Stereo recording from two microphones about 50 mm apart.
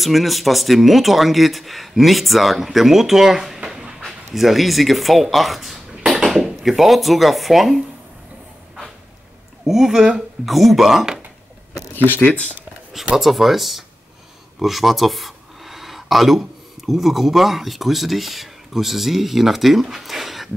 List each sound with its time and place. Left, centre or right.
0.0 s speech: centre
3.6 s dog: centre
4.3 s speech: centre
9.7 s speech: centre
11.9 s speech: left
13.1 s speech: centre